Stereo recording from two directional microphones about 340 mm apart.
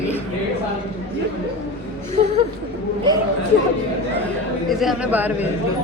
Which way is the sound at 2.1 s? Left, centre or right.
Centre.